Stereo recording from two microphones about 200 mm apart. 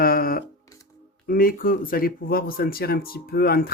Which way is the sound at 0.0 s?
45° left (ahead or behind).